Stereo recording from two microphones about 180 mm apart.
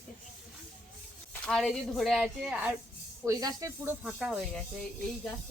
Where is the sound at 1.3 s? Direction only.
5° left (ahead or behind).